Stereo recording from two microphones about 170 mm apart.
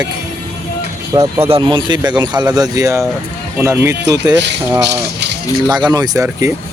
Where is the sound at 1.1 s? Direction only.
15° right (ahead or behind).